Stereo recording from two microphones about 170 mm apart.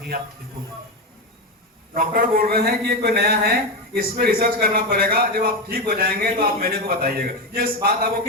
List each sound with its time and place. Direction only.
1.9 s a man's voice: 60° right (ahead or behind)